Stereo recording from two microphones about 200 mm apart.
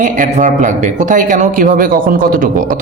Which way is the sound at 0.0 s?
40° right (ahead or behind).